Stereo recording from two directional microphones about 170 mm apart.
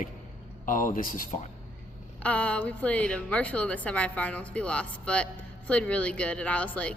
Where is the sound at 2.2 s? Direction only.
5° left (ahead or behind).